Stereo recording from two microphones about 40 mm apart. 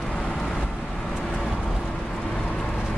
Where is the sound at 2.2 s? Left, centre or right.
Centre.